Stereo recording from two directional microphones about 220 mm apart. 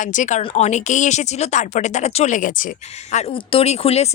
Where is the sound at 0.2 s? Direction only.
35° left (ahead or behind).